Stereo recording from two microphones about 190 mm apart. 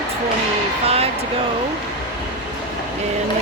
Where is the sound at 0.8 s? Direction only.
30° right (ahead or behind).